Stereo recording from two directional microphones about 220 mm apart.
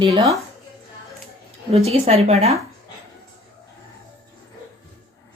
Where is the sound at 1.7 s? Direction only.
30° right (ahead or behind).